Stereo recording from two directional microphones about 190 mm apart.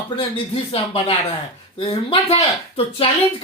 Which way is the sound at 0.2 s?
30° left (ahead or behind).